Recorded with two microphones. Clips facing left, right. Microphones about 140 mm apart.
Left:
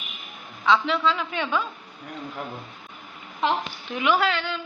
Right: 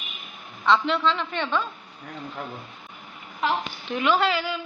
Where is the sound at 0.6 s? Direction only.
Centre (ahead or behind).